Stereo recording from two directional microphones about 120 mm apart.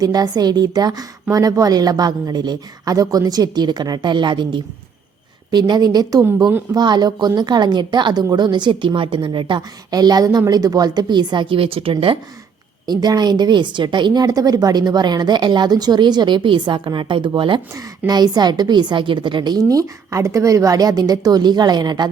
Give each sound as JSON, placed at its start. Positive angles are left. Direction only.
{"t": 0.0, "sound": "a woman's voice", "side_deg": -35}
{"t": 12.8, "sound": "a woman's voice", "side_deg": -35}
{"t": 17.7, "sound": "a woman's voice", "side_deg": -30}